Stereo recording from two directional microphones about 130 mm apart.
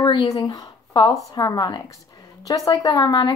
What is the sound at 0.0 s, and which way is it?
A woman's voice, 35° left (ahead or behind).